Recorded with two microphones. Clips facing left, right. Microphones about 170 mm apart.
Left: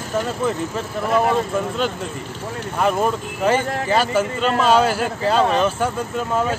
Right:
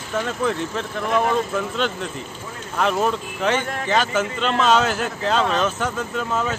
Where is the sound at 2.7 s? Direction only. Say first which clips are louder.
Left 1 dB; 5° left (ahead or behind).